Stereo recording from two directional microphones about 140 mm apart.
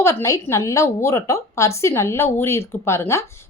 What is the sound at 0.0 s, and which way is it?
A woman's voice, 20° left (ahead or behind).